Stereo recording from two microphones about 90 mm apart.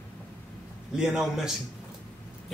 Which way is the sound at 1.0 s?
5° right (ahead or behind).